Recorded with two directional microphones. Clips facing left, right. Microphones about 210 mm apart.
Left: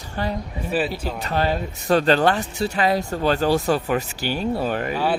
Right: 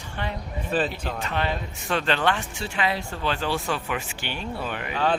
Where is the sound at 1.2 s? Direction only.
40° left (ahead or behind).